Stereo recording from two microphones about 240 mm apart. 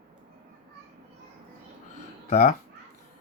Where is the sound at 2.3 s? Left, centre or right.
Left.